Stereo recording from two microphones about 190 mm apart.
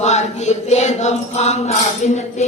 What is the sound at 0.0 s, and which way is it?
Mantra, 35° left (ahead or behind).